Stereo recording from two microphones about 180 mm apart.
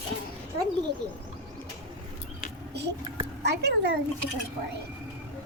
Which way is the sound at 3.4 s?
70° right (ahead or behind).